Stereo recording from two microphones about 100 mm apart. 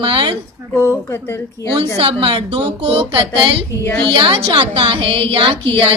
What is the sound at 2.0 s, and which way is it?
A woman's voice, 65° right (ahead or behind).